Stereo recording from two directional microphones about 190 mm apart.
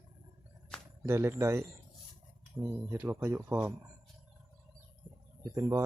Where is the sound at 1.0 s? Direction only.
15° right (ahead or behind).